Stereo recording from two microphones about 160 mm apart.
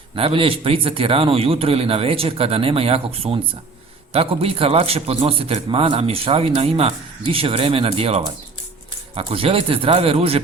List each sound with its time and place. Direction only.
0.2 s a man's voice: 35° right (ahead or behind)